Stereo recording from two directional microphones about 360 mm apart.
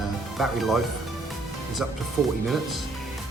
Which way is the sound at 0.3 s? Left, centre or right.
Centre.